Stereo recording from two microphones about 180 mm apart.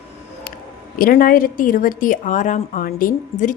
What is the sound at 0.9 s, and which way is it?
A woman's voice, 55° left (ahead or behind).